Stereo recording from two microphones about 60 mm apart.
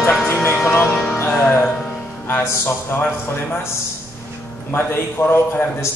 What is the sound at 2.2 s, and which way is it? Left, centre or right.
Music, left.